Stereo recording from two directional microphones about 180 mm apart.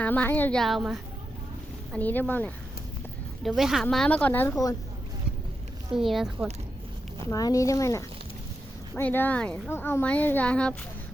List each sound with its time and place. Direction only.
0.0 s a woman's voice: 10° left (ahead or behind)
1.9 s speech: 10° left (ahead or behind)
3.4 s a woman's voice: centre (ahead or behind)
5.9 s a woman's voice: centre (ahead or behind)
7.3 s speech: 20° left (ahead or behind)